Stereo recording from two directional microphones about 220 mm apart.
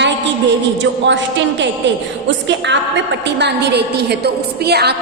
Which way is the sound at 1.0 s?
55° right (ahead or behind).